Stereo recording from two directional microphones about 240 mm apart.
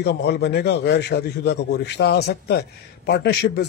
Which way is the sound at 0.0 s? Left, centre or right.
Left.